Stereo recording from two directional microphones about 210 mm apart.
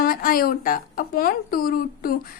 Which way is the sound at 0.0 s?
45° left (ahead or behind).